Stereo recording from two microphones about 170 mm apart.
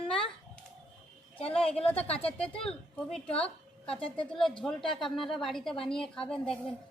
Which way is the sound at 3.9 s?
30° left (ahead or behind).